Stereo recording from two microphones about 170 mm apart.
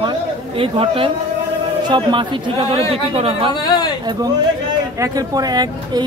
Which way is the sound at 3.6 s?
25° left (ahead or behind).